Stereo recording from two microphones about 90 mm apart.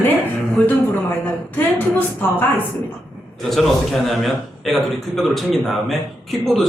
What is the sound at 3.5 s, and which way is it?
A man's voice, centre (ahead or behind).